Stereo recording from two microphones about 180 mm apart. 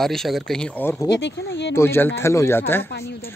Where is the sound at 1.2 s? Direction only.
80° left.